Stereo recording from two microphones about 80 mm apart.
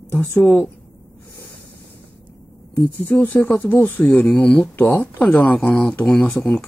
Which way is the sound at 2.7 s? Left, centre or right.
Left.